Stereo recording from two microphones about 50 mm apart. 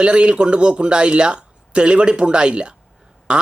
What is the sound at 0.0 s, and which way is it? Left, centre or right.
Speech, right.